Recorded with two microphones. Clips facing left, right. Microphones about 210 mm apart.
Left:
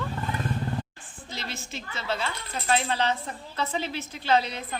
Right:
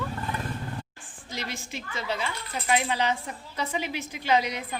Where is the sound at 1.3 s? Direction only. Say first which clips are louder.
Right 2 dB; 15° right (ahead or behind).